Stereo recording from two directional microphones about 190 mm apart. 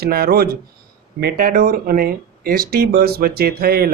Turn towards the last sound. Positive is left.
turn(degrees=-55)  # may be behind; listen again after turning